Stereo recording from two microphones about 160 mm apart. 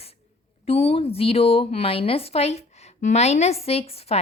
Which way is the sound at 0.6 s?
40° left (ahead or behind).